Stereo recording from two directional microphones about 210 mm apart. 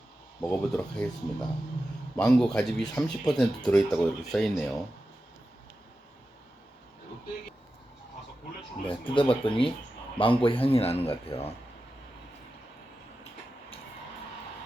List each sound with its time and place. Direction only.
0.4 s speech: 5° left (ahead or behind)
8.9 s a man's voice: 25° left (ahead or behind)